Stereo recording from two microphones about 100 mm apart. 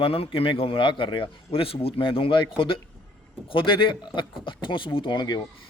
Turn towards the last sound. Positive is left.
turn(degrees=45)  # may be behind; listen again after turning